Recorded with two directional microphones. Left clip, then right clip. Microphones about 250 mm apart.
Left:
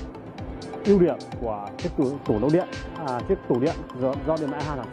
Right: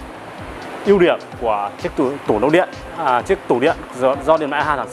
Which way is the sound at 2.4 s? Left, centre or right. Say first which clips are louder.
Right 9 dB; centre.